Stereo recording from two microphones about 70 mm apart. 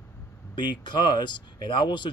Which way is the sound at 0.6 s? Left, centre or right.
Left.